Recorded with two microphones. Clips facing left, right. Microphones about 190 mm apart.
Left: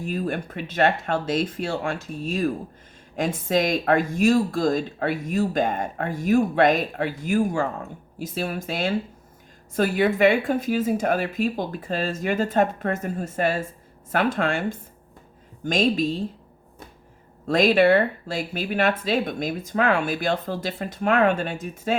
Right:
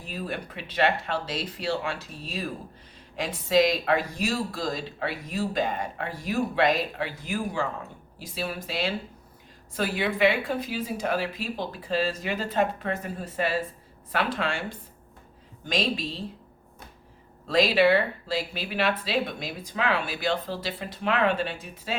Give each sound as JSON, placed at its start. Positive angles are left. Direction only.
{"t": 0.0, "sound": "speech", "side_deg": 50}
{"t": 17.4, "sound": "speech", "side_deg": 50}